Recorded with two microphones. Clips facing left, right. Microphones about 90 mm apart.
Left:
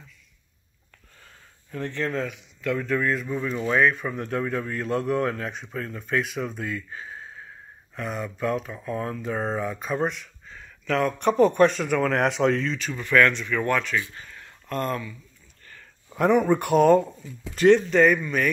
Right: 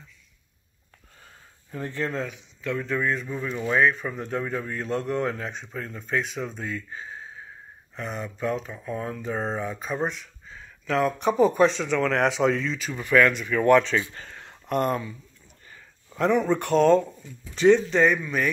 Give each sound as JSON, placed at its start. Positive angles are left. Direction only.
{"t": 1.7, "sound": "a man's voice", "side_deg": -10}
{"t": 16.1, "sound": "a man's voice", "side_deg": 15}